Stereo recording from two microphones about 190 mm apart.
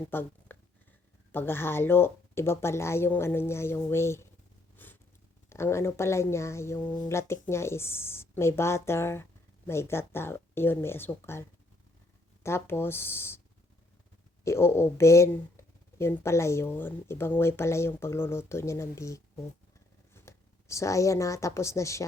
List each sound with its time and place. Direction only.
0.1 s speech: 10° left (ahead or behind)
4.8 s a sound: 10° left (ahead or behind)
5.5 s speech: 15° left (ahead or behind)
14.4 s a woman's voice: 15° left (ahead or behind)